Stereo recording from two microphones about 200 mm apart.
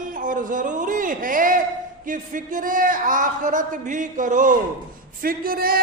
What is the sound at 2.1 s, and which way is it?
A man's voice, 40° right (ahead or behind).